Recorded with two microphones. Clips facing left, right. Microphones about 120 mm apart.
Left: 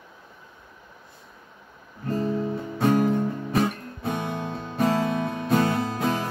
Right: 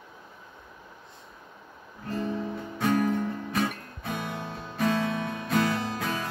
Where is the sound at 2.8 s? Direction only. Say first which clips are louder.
Left 4 dB; 30° left (ahead or behind).